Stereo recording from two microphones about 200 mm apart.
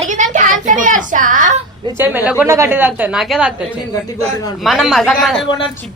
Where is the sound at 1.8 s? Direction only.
10° right (ahead or behind).